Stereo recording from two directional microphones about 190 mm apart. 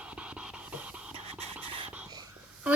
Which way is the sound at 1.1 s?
30° right (ahead or behind).